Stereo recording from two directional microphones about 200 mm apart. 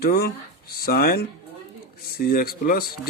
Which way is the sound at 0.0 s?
50° left (ahead or behind).